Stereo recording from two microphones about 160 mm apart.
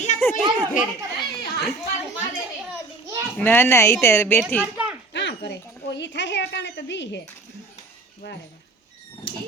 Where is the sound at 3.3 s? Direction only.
10° left (ahead or behind).